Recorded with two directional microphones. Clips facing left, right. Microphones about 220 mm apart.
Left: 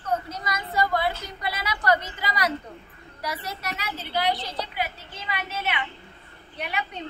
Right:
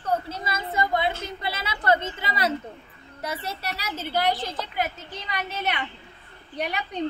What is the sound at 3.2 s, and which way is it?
A woman's voice, 25° right (ahead or behind).